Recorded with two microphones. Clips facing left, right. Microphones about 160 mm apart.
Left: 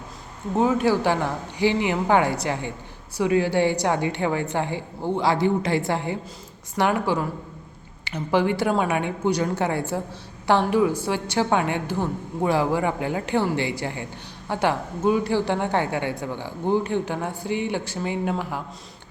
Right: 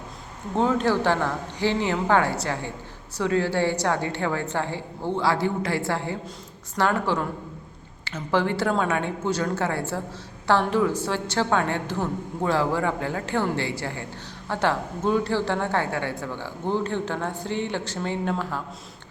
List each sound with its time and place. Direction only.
0.5 s a woman's voice: 10° left (ahead or behind)